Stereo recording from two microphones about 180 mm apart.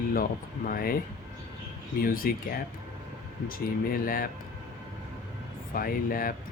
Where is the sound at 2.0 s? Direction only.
50° left (ahead or behind).